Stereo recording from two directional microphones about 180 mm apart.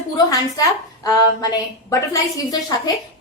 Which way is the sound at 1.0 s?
20° left (ahead or behind).